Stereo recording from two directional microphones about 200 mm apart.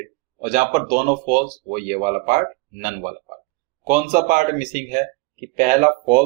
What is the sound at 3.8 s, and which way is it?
Speech, 40° right (ahead or behind).